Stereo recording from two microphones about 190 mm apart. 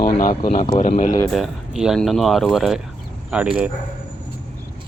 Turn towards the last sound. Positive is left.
turn(degrees=-5)  # may be behind; listen again after turning